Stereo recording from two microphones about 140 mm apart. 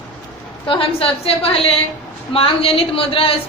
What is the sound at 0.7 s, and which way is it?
A woman's voice, 40° left (ahead or behind).